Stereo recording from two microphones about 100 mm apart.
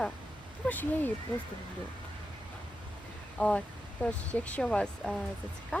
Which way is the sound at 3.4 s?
10° left (ahead or behind).